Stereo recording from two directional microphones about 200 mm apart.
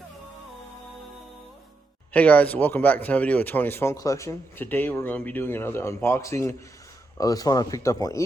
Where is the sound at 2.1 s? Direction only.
5° left (ahead or behind).